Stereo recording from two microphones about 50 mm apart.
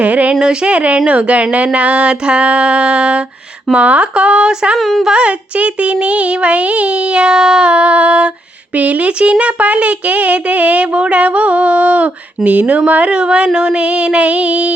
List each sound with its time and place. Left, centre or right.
0.0 s child singing: right
0.3 s child singing: centre
4.8 s speech: centre
5.0 s child singing: right